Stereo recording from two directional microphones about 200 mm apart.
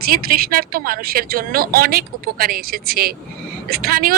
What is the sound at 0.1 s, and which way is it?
Speech, 50° right (ahead or behind).